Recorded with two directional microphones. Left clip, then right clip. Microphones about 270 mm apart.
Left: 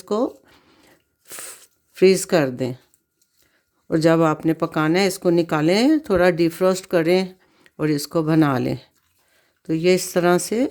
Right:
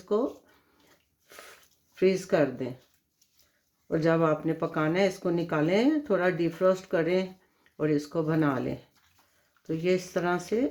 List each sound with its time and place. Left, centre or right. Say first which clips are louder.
0.0 s a sound: left 5 dB; left
2.0 s speech: left 8 dB; left
3.8 s speech: left 8 dB; left